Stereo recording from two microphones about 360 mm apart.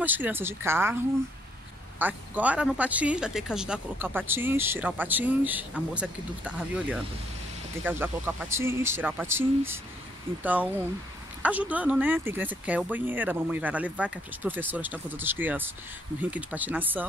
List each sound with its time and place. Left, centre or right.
0.0 s speech: centre
2.0 s speech: centre